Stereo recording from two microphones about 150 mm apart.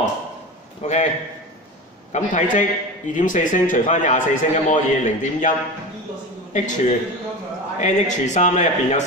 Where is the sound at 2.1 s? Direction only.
55° left (ahead or behind).